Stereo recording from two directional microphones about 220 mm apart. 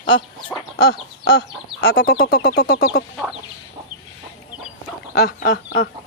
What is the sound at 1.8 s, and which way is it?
Speech, 45° left (ahead or behind).